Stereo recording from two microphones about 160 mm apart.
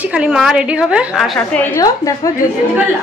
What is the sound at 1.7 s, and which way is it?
Speech, 20° left (ahead or behind).